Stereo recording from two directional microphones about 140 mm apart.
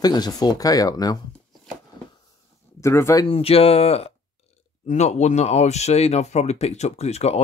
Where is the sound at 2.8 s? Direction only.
20° left (ahead or behind).